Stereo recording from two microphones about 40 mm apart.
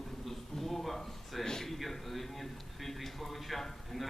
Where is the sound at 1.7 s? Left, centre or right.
Centre.